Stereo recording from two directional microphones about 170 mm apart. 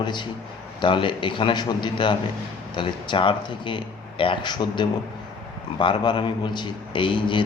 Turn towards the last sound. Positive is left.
turn(degrees=30)  # may be behind; listen again after turning